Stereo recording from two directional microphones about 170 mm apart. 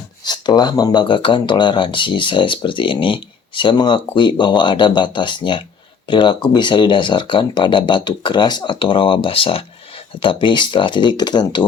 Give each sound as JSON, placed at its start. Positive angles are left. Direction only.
{"t": 0.3, "sound": "speech", "side_deg": 25}